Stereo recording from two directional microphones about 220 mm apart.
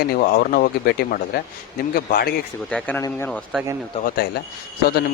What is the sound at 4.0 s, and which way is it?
Speech, 40° left (ahead or behind).